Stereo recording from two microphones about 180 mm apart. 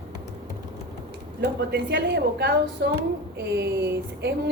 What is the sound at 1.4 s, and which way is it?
A woman's voice, 70° right (ahead or behind).